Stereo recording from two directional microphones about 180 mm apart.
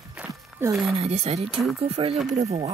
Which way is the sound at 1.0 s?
35° right (ahead or behind).